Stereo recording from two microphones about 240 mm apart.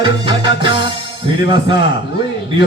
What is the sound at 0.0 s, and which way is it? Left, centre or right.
Music, centre.